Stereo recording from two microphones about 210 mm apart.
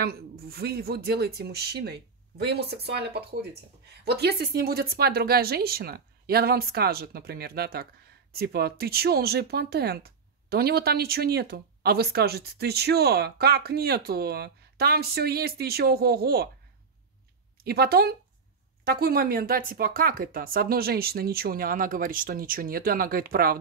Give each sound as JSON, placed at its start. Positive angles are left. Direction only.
{"t": 0.0, "sound": "speech", "side_deg": -45}
{"t": 17.6, "sound": "speech", "side_deg": -50}